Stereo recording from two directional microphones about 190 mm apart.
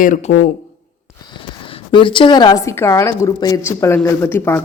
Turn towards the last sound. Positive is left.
turn(degrees=10)  # may be behind; listen again after turning